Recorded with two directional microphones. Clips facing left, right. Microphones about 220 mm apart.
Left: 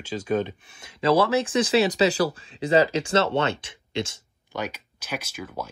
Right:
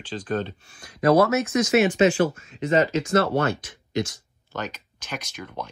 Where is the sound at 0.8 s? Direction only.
30° left (ahead or behind).